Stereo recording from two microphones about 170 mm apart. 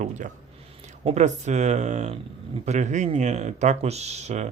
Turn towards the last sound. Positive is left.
turn(degrees=-40)  # may be behind; listen again after turning